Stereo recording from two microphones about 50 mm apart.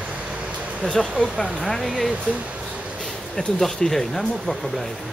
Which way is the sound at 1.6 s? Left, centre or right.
Centre.